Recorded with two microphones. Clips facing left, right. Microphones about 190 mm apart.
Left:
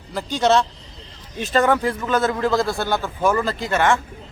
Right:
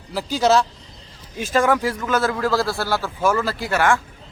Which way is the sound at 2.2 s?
20° left (ahead or behind).